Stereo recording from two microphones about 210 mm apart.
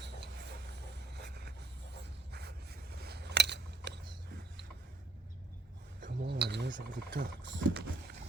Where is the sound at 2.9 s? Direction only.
50° right (ahead or behind).